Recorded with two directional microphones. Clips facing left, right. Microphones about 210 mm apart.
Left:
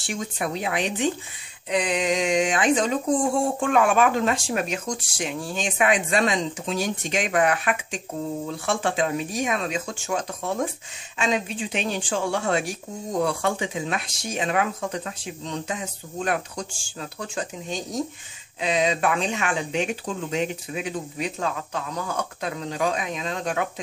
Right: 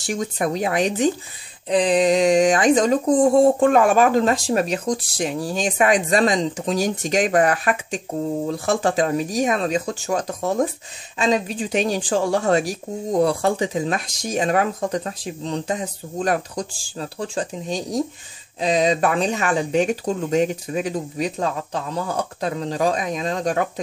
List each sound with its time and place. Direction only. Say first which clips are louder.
0.0 s speech: right 6 dB; 40° right (ahead or behind)